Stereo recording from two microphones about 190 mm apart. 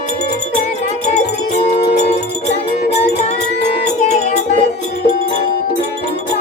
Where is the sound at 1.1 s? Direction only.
40° left (ahead or behind).